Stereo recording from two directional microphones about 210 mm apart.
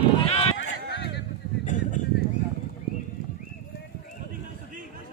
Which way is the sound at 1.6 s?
35° left (ahead or behind).